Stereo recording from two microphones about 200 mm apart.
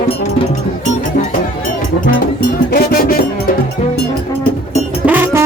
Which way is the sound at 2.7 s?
50° left (ahead or behind).